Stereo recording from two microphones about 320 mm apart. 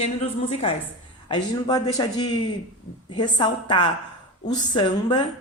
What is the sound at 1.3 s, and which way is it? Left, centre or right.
Speech, centre.